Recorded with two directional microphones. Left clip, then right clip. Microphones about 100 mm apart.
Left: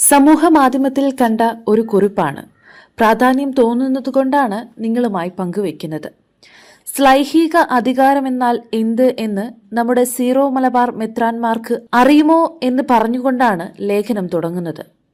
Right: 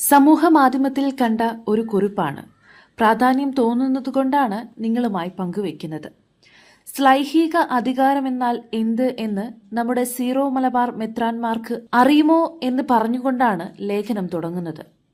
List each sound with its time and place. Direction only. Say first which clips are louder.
0.3 s a woman's voice: left 4 dB; 25° left (ahead or behind)
3.2 s a woman's voice: left 5 dB; 25° left (ahead or behind)